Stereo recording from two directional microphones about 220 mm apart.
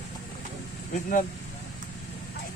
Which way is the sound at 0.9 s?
35° left (ahead or behind).